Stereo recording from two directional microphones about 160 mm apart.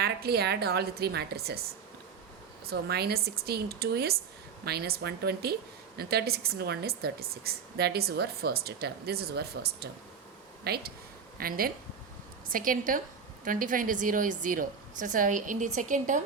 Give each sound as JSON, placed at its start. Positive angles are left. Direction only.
{"t": 0.0, "sound": "speech", "side_deg": -85}
{"t": 2.6, "sound": "speech", "side_deg": -90}
{"t": 11.3, "sound": "a woman's voice", "side_deg": -65}